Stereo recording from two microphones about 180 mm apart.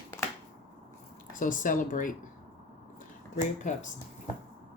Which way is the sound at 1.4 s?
50° left (ahead or behind).